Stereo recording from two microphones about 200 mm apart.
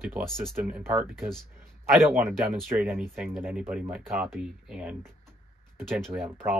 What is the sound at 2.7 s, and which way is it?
Speech, 5° right (ahead or behind).